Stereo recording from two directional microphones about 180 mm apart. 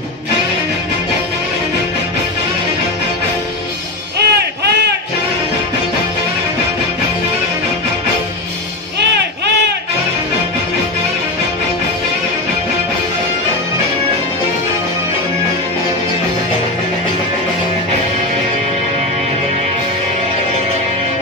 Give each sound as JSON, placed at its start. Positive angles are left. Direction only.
{"t": 4.2, "sound": "music", "side_deg": -65}